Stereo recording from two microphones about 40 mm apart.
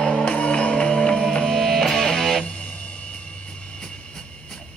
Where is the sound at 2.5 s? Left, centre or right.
Left.